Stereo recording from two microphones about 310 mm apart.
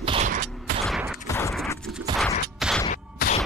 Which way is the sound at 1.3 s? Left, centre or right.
Centre.